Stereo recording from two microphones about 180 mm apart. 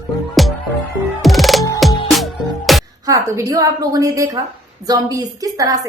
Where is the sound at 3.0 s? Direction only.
20° right (ahead or behind).